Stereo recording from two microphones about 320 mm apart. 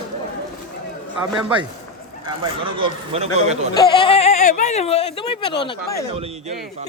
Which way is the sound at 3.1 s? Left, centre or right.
Centre.